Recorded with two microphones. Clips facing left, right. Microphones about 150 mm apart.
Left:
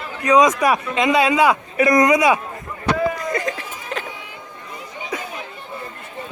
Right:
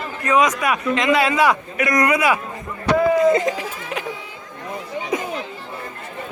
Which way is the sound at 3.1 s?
20° right (ahead or behind).